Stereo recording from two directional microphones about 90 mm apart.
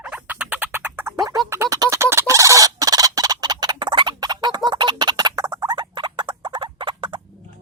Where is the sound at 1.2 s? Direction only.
45° right (ahead or behind).